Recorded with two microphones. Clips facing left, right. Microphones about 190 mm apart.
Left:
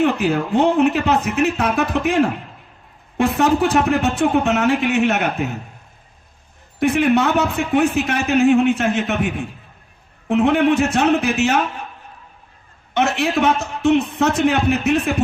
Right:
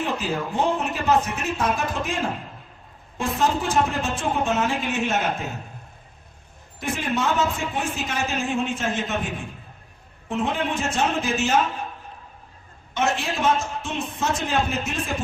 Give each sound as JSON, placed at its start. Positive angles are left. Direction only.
{"t": 0.0, "sound": "speech", "side_deg": 65}
{"t": 6.7, "sound": "speech", "side_deg": 65}
{"t": 12.9, "sound": "speech", "side_deg": 65}